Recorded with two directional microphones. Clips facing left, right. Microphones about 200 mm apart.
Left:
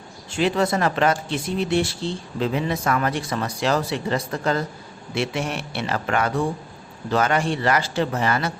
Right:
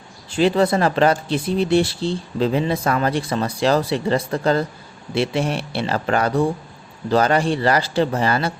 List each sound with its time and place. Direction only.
0.3 s speech: 35° right (ahead or behind)